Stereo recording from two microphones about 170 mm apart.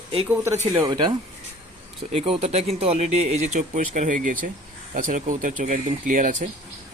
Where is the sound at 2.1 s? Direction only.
35° right (ahead or behind).